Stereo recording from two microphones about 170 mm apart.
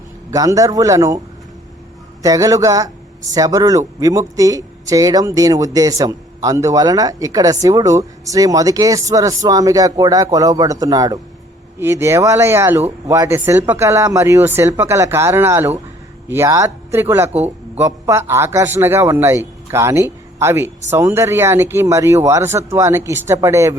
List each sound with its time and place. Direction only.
0.3 s speech: 20° right (ahead or behind)
2.2 s a man's voice: 20° right (ahead or behind)